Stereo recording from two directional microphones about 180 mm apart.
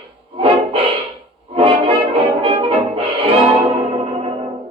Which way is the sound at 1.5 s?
30° right (ahead or behind).